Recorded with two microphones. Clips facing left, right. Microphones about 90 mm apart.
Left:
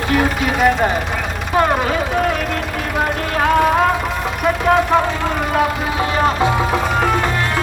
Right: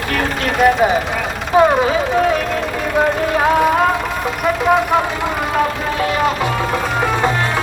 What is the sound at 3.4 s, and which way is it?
Music, centre (ahead or behind).